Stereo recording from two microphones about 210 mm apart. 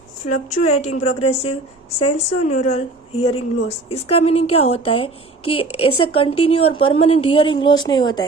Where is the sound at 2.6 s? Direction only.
35° left (ahead or behind).